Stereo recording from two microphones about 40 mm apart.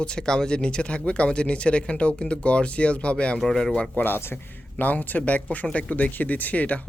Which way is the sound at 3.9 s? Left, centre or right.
Left.